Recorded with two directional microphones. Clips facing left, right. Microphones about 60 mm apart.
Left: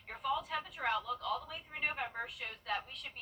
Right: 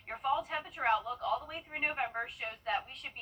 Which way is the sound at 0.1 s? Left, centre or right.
Right.